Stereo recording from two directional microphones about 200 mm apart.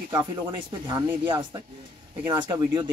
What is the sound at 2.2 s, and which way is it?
Speech, 20° right (ahead or behind).